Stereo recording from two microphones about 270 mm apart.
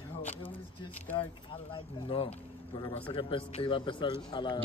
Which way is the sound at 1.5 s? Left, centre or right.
Centre.